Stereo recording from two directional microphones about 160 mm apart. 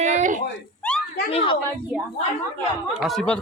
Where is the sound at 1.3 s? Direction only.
35° left (ahead or behind).